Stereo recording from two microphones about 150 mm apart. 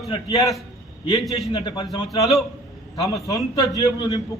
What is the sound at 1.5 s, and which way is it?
Speech, 30° left (ahead or behind).